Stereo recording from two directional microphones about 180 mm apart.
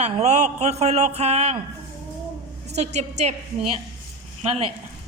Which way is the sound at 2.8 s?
40° right (ahead or behind).